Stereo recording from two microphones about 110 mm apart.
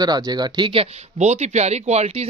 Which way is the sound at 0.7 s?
80° right.